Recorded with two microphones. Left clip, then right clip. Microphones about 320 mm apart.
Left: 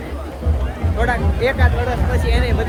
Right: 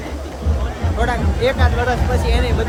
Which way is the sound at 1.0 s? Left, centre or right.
Centre.